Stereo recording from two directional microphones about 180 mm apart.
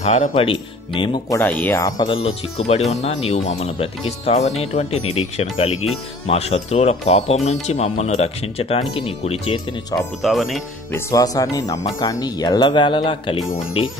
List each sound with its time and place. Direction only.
0.0 s speech: 40° left (ahead or behind)
0.3 s speech: 30° left (ahead or behind)
1.4 s speech: 10° left (ahead or behind); by 9.6 s 30° left (ahead or behind)
10.2 s speech: centre (ahead or behind)
10.9 s speech: 20° left (ahead or behind)